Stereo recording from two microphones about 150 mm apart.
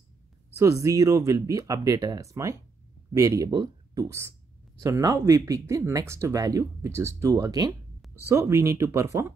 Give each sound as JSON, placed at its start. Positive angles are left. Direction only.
{"t": 0.6, "sound": "speech", "side_deg": -20}